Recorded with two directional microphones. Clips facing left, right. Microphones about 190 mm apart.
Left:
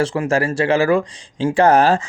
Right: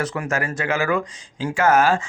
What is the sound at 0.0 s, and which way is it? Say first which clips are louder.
Speech: left 7 dB; 30° left (ahead or behind).